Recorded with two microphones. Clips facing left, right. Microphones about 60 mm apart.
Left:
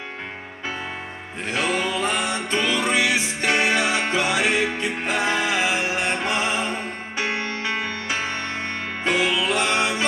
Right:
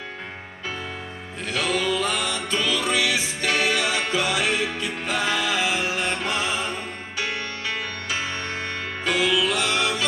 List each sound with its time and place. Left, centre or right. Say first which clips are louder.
1.5 s music: even; left